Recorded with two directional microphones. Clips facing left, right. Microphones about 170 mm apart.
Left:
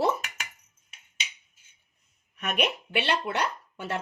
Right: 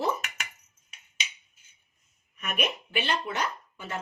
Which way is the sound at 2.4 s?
70° left (ahead or behind).